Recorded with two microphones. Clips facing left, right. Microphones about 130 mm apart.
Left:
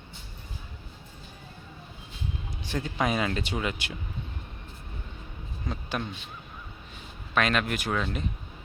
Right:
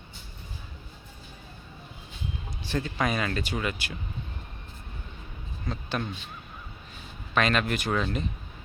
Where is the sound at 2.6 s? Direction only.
15° left (ahead or behind).